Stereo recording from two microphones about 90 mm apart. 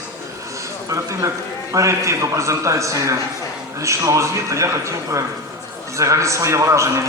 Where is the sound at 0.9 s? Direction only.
35° right (ahead or behind).